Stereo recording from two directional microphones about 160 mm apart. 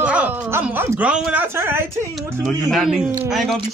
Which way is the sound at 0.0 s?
10° right (ahead or behind).